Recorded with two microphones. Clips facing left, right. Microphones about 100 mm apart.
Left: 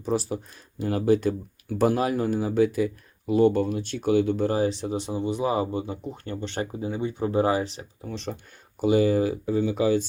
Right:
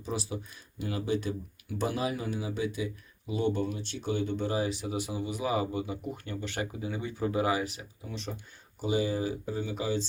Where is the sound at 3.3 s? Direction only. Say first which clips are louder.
Left 9 dB; 50° left (ahead or behind); by 4.3 s 65° left (ahead or behind).